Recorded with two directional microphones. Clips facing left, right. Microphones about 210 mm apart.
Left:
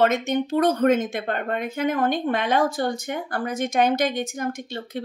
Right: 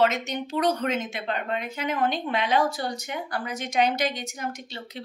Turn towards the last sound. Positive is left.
turn(degrees=50)  # may be behind; listen again after turning